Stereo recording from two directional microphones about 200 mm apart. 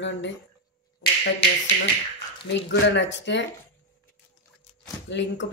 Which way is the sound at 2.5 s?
60° left (ahead or behind).